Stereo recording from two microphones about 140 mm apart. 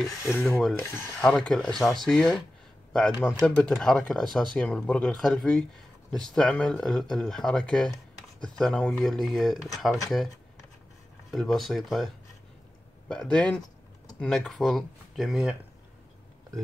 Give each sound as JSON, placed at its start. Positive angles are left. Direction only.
{"t": 0.2, "sound": "speech", "side_deg": 15}
{"t": 0.6, "sound": "speech", "side_deg": 5}
{"t": 11.3, "sound": "speech", "side_deg": 0}
{"t": 13.1, "sound": "speech", "side_deg": 5}